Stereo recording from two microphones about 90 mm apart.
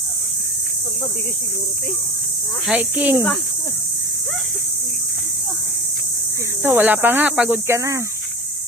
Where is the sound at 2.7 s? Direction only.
15° right (ahead or behind).